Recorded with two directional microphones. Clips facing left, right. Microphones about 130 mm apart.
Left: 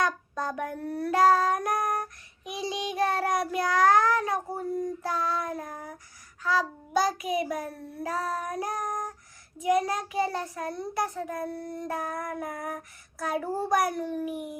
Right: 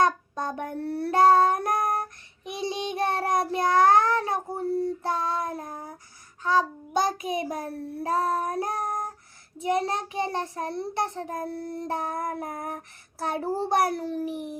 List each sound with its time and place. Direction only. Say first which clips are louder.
0.0 s child singing: right 4 dB; 25° right (ahead or behind)
9.6 s a child's voice: left 1 dB; 30° right (ahead or behind)